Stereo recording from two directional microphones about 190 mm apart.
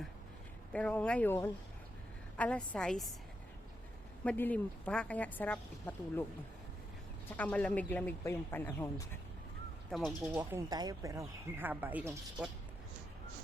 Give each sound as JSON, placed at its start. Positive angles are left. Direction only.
{"t": 0.7, "sound": "a woman's voice", "side_deg": 5}
{"t": 4.2, "sound": "a woman's voice", "side_deg": 10}
{"t": 7.3, "sound": "a woman's voice", "side_deg": 5}
{"t": 9.9, "sound": "a woman's voice", "side_deg": 0}
{"t": 10.3, "sound": "speech", "side_deg": -15}